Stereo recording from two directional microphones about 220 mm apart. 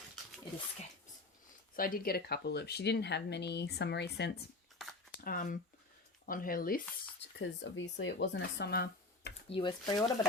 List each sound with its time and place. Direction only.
1.7 s speech: 40° left (ahead or behind)
9.5 s speech: 20° left (ahead or behind)